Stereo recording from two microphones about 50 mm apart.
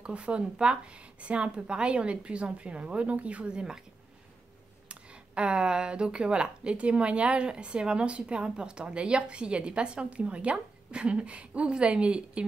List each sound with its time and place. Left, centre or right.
0.0 s speech: right
4.8 s speech: right